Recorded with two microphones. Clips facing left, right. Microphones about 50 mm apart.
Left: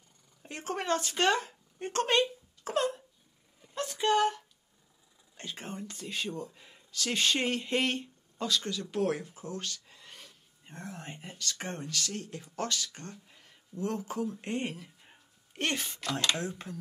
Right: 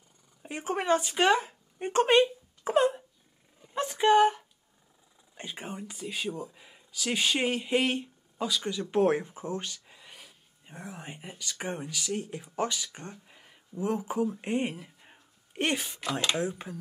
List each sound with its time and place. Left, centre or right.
0.4 s speech: centre
8.9 s speech: right